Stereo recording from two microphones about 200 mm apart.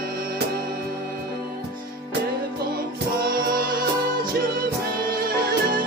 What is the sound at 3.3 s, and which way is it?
Music, 45° right (ahead or behind).